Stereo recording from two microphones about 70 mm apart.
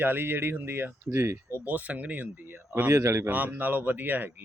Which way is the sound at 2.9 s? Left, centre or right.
Right.